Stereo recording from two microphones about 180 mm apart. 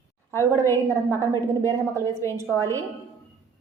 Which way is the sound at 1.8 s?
15° right (ahead or behind).